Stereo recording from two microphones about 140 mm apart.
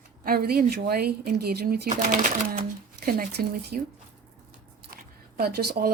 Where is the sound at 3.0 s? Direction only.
90° right.